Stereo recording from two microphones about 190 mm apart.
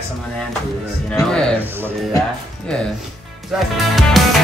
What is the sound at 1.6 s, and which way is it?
Speech, 10° right (ahead or behind).